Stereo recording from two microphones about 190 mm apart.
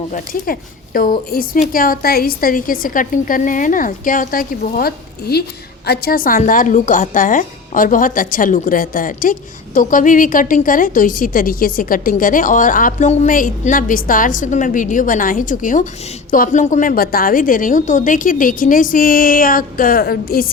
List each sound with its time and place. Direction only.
0.1 s a woman's voice: 50° left (ahead or behind)